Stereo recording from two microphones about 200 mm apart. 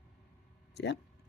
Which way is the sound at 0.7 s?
60° left (ahead or behind).